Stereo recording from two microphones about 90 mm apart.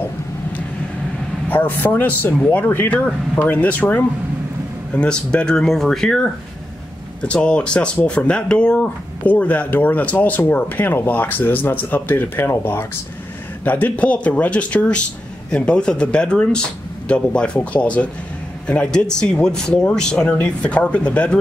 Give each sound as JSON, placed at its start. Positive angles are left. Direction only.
{"t": 1.5, "sound": "speech", "side_deg": 20}